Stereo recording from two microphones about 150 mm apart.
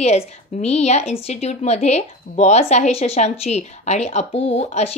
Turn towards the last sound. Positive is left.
turn(degrees=45)  # may be behind; listen again after turning